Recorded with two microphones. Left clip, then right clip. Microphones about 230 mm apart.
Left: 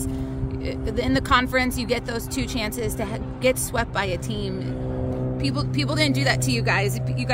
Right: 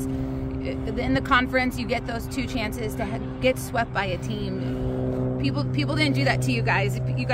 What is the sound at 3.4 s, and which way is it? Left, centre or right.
Speech, left.